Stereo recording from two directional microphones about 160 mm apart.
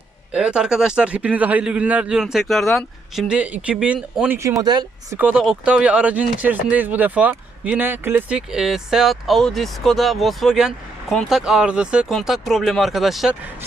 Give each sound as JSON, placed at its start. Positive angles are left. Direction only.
{"t": 0.3, "sound": "speech", "side_deg": -5}
{"t": 5.1, "sound": "speech", "side_deg": -10}